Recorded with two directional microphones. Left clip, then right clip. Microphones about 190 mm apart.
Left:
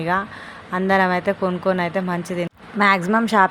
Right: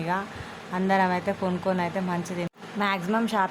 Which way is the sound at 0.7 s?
20° left (ahead or behind).